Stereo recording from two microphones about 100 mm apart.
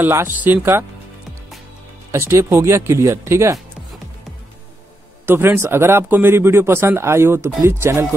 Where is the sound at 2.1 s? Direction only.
30° right (ahead or behind).